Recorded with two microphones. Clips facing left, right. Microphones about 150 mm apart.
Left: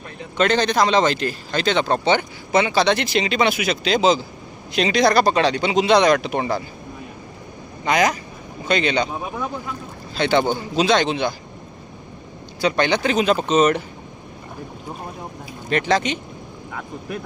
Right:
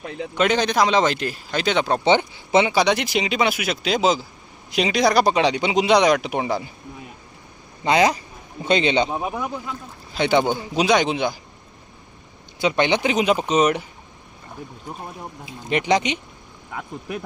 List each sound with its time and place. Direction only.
0.3 s speech: 10° right (ahead or behind)
2.0 s speech: 20° right (ahead or behind)
7.9 s speech: 30° right (ahead or behind)
12.5 s speech: 20° right (ahead or behind)
15.7 s speech: 15° right (ahead or behind)